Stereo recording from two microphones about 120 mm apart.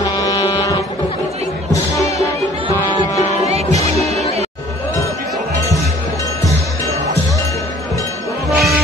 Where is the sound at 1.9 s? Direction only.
25° left (ahead or behind).